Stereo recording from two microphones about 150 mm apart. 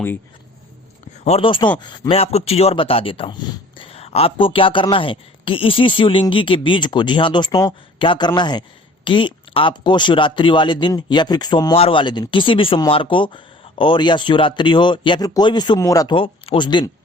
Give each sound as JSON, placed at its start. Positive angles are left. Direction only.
{"t": 1.2, "sound": "speech", "side_deg": 40}
{"t": 16.1, "sound": "speech", "side_deg": 35}